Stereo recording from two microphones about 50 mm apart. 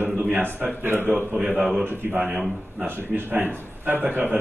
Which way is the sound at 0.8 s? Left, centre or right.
Right.